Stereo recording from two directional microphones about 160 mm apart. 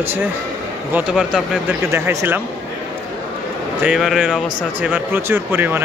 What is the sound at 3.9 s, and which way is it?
Speech, centre (ahead or behind).